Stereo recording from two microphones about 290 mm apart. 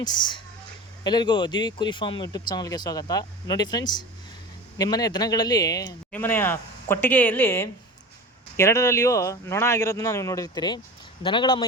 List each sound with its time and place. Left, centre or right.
0.0 s speech: centre